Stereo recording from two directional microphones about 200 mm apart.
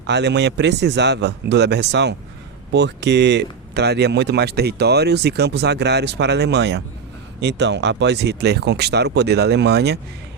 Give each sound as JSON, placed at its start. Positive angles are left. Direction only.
{"t": 0.1, "sound": "speech", "side_deg": -60}